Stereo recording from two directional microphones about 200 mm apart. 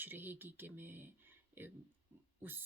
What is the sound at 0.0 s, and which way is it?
Speech, 10° right (ahead or behind).